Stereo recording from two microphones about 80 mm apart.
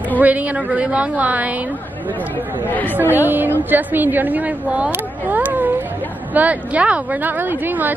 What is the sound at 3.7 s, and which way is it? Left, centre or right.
A woman's voice, right.